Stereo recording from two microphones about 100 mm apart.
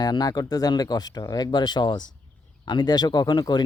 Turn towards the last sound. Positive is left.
turn(degrees=45)  # may be behind; listen again after turning